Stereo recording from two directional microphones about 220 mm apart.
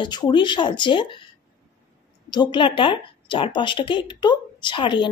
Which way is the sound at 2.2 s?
20° left (ahead or behind).